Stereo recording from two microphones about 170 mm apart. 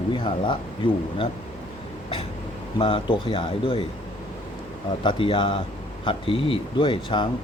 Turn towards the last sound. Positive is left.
turn(degrees=30)  # may be behind; listen again after turning